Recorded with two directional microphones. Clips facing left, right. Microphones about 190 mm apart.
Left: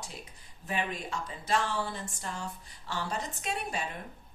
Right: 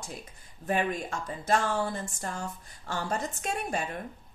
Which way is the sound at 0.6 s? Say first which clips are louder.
Right 5 dB; 50° right (ahead or behind).